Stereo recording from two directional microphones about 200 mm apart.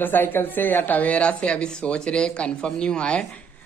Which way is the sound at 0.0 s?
10° left (ahead or behind).